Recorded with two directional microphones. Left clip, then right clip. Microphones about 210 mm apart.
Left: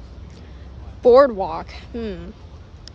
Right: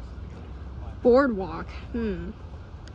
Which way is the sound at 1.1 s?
25° left (ahead or behind).